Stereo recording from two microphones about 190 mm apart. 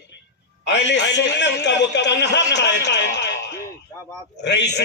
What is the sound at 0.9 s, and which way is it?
Speech, 70° left (ahead or behind).